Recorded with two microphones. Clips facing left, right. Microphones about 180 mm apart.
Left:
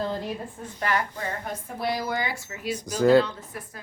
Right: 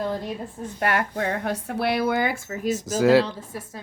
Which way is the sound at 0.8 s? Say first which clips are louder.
Right 3 dB; 60° right (ahead or behind).